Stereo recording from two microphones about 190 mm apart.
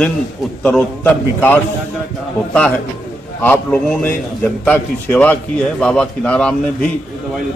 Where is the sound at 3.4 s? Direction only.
5° left (ahead or behind).